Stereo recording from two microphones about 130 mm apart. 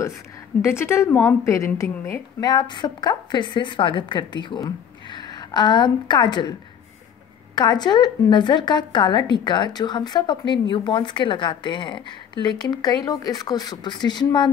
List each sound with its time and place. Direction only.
0.6 s a woman's voice: 20° left (ahead or behind)
2.4 s a woman's voice: 35° left (ahead or behind)
7.5 s a woman's voice: 35° left (ahead or behind)